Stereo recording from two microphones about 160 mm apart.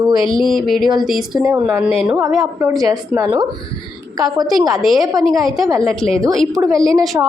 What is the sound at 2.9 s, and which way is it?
Speech, 20° right (ahead or behind).